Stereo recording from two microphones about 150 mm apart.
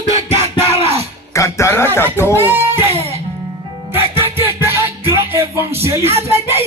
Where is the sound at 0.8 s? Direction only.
45° right (ahead or behind).